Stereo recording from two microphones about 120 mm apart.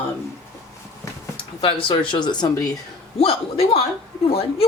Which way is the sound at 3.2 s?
50° left (ahead or behind).